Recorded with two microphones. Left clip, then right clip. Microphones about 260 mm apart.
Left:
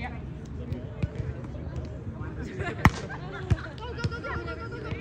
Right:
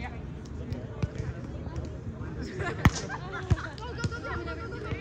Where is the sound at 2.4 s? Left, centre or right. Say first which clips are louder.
Even; right.